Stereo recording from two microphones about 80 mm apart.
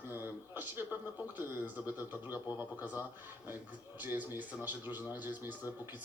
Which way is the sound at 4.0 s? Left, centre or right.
Right.